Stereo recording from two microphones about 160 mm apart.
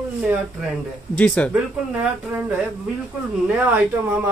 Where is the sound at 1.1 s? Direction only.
10° left (ahead or behind).